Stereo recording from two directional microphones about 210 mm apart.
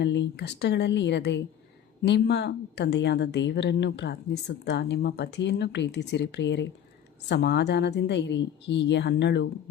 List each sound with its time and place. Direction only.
0.0 s a woman's voice: 55° left (ahead or behind)